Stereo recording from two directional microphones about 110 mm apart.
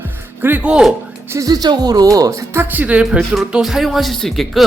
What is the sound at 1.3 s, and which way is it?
Speech, 35° right (ahead or behind).